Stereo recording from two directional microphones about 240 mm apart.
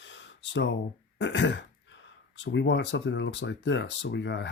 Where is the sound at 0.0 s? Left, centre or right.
Left.